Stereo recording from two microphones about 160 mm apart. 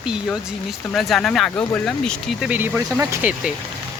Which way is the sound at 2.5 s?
15° right (ahead or behind).